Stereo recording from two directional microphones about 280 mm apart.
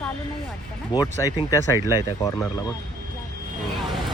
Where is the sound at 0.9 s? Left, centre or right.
Centre.